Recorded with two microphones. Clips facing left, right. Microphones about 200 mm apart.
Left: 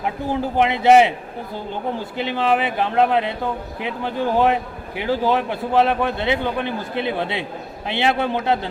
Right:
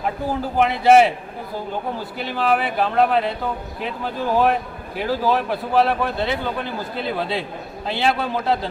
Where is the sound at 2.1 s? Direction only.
20° left (ahead or behind).